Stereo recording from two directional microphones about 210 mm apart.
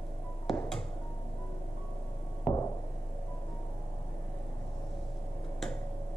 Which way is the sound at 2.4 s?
15° left (ahead or behind).